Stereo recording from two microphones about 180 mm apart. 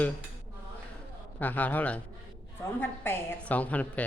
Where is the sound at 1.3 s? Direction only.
10° left (ahead or behind).